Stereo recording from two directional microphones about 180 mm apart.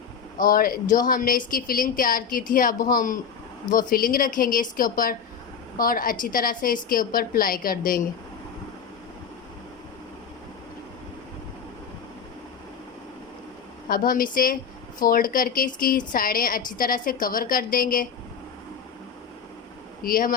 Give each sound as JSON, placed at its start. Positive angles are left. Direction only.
{"t": 0.3, "sound": "a woman's voice", "side_deg": 55}
{"t": 13.8, "sound": "a woman's voice", "side_deg": 50}
{"t": 20.1, "sound": "a woman's voice", "side_deg": 50}